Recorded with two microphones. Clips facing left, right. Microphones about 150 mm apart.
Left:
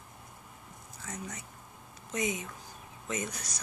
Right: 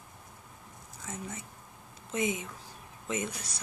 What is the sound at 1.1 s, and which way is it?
Speech, 25° right (ahead or behind).